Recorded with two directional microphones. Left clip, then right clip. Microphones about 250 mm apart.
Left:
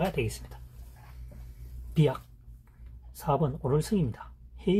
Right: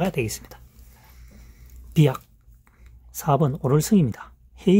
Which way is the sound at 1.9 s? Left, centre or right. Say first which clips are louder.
Right 6 dB; right.